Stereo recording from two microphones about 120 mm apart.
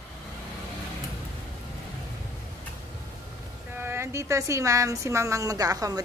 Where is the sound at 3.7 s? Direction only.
20° right (ahead or behind).